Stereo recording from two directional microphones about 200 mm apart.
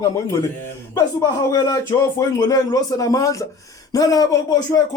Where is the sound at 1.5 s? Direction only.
15° left (ahead or behind).